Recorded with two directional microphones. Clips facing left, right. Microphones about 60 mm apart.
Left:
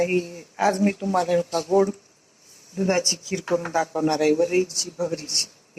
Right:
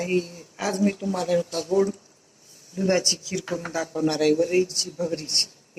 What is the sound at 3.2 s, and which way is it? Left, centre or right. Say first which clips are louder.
Speech: left 5 dB; left.